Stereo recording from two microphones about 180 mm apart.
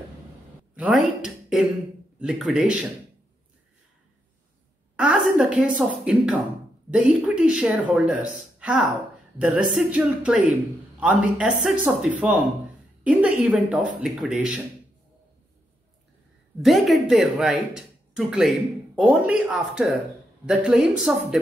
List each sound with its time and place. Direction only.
0.7 s speech: centre (ahead or behind)
4.9 s a sound: 5° right (ahead or behind)
5.8 s a woman's voice: 5° right (ahead or behind)
16.6 s speech: centre (ahead or behind)